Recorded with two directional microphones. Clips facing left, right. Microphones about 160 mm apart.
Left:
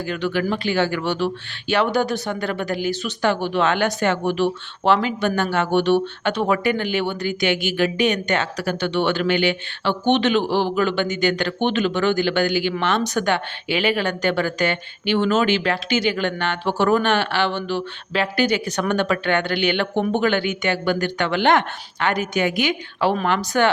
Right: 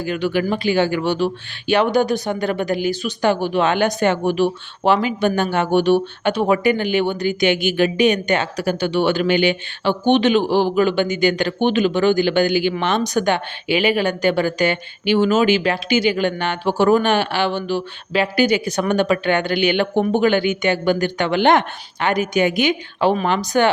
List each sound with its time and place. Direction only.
0.0 s a woman's voice: 15° right (ahead or behind)